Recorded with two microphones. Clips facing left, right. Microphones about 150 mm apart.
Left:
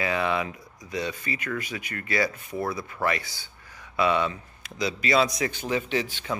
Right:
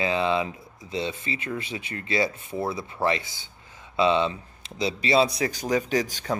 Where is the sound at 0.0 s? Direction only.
25° right (ahead or behind).